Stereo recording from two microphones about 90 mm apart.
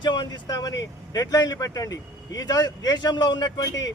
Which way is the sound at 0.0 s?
55° left (ahead or behind).